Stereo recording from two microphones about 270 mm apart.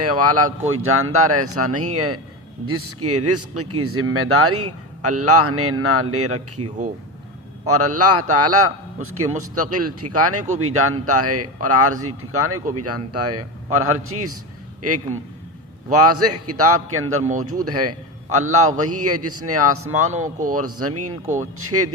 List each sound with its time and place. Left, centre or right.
0.0 s speech: right
7.7 s a man's voice: right